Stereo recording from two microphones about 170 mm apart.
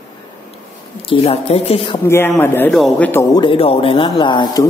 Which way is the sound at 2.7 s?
Centre (ahead or behind).